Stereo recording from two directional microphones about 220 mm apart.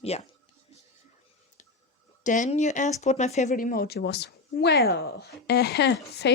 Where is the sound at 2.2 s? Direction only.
35° left (ahead or behind).